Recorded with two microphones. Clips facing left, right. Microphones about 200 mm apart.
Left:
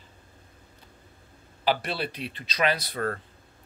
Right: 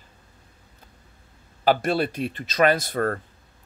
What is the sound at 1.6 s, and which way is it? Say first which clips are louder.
Speech: right 6 dB; 45° right (ahead or behind).